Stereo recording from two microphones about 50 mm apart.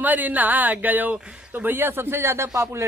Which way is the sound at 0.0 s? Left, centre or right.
Right.